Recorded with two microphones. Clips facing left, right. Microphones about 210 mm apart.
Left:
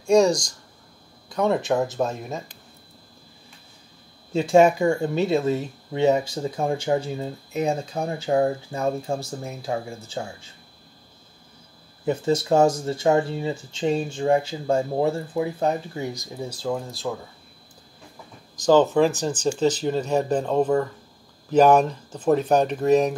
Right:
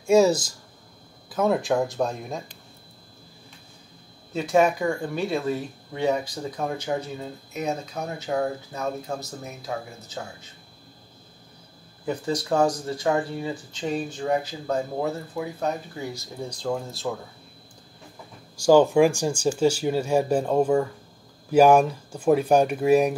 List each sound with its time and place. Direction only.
0.0 s speech: 5° right (ahead or behind)
4.3 s speech: 25° left (ahead or behind)
12.1 s speech: 25° left (ahead or behind)
16.3 s speech: 5° left (ahead or behind)
18.6 s speech: 10° right (ahead or behind)